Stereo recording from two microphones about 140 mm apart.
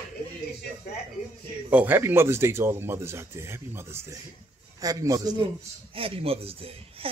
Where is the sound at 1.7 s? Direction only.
10° right (ahead or behind).